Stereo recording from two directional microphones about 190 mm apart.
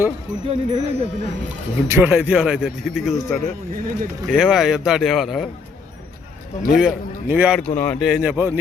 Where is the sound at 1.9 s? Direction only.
10° right (ahead or behind).